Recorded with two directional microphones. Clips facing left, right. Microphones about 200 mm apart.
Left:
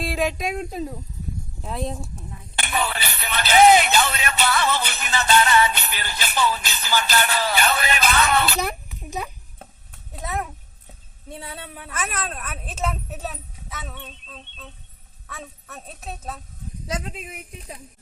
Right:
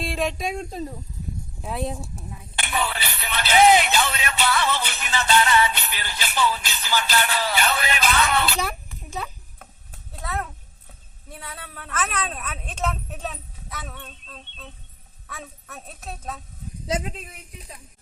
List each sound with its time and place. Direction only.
0.0 s speech: centre (ahead or behind)
2.6 s speech: 45° left (ahead or behind)
9.0 s a sound: 15° left (ahead or behind)
11.3 s a woman's voice: 25° left (ahead or behind)
11.7 s speech: 10° left (ahead or behind)
17.2 s speech: 15° left (ahead or behind)